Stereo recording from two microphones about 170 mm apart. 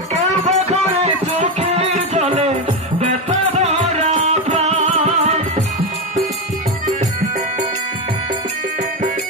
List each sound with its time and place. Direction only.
0.1 s music: 40° right (ahead or behind)